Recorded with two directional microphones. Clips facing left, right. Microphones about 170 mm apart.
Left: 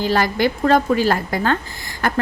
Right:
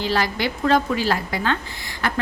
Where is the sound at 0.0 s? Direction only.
50° left (ahead or behind).